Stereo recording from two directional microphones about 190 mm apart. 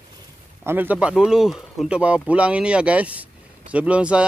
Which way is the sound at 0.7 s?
10° right (ahead or behind).